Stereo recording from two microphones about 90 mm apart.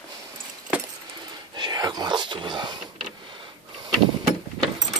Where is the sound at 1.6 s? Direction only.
50° right (ahead or behind).